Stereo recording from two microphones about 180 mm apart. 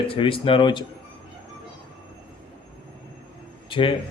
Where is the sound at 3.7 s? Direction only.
30° left (ahead or behind).